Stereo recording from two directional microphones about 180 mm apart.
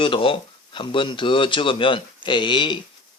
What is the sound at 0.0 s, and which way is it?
Speech, 30° left (ahead or behind).